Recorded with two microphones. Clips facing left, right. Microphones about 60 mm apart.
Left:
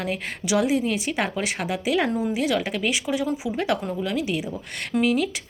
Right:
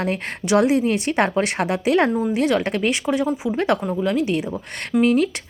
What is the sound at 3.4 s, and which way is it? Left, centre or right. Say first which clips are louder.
Speech: right 4 dB; right.